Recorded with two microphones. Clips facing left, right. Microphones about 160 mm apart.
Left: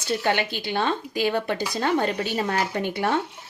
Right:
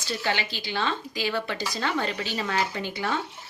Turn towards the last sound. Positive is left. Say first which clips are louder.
# left 5 dB
turn(degrees=60)  # may be behind; listen again after turning